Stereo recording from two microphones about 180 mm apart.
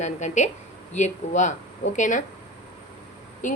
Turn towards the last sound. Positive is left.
turn(degrees=45)  # may be behind; listen again after turning